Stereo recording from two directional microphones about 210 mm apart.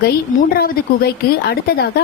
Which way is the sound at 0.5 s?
50° left (ahead or behind).